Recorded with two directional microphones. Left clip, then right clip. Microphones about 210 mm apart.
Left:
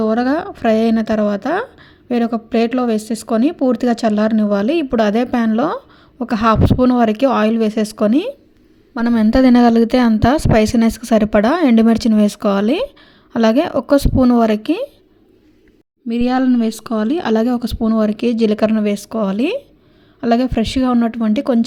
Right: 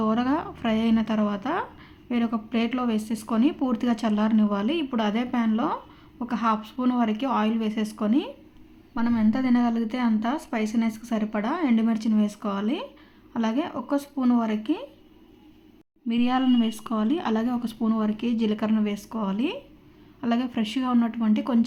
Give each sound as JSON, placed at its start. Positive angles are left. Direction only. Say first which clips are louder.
{"t": 0.0, "sound": "a woman's voice", "louder": "left 9 dB", "side_deg": 30}
{"t": 16.0, "sound": "a woman's voice", "louder": "left 7 dB", "side_deg": 30}